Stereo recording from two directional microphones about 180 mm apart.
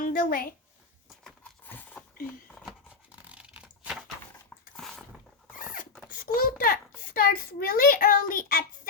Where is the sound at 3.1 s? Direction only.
10° right (ahead or behind).